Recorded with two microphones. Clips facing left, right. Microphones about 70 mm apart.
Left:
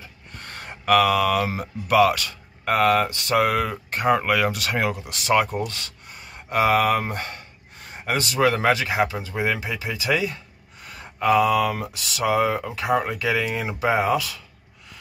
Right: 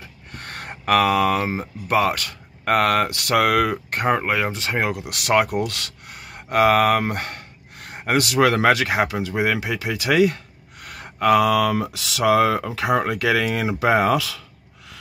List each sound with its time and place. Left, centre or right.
0.3 s speech: right
3.9 s speech: right
4.2 s speech: right
5.1 s speech: right
5.7 s speech: right